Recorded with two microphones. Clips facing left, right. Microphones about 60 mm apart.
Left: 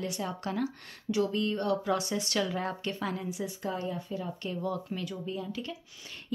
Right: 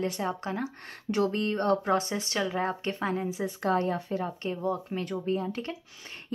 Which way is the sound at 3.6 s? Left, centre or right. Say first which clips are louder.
Right 9 dB; right.